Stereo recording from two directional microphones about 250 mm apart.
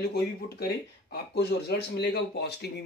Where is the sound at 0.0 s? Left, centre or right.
Left.